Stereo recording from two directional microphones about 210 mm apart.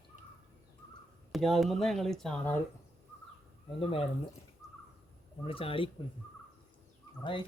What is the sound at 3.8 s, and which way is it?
Speech, 25° left (ahead or behind).